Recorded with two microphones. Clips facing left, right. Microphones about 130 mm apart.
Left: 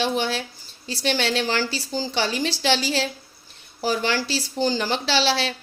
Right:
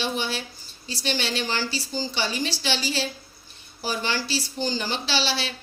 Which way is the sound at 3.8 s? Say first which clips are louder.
Left 5 dB; 90° left.